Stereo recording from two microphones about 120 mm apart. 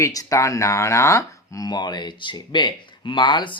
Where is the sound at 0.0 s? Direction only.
30° left (ahead or behind).